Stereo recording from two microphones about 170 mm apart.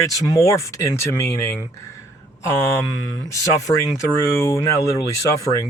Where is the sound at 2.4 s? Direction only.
15° left (ahead or behind).